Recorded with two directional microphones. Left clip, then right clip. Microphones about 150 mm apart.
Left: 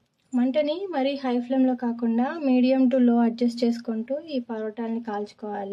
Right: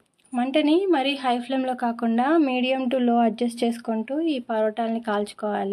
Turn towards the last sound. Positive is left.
turn(degrees=-35)  # may be behind; listen again after turning